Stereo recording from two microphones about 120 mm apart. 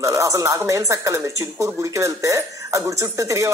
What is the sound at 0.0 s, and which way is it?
Speech, 25° right (ahead or behind).